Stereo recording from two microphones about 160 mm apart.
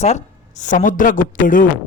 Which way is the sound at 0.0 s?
45° left (ahead or behind).